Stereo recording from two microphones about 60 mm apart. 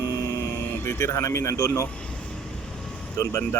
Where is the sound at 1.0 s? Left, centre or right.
Left.